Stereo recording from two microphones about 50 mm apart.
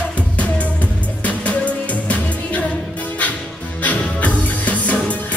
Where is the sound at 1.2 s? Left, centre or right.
Left.